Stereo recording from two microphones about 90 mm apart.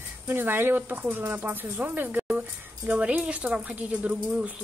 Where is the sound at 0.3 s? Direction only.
20° right (ahead or behind).